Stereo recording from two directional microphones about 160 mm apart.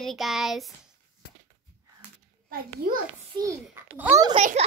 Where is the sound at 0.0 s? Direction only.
Centre (ahead or behind).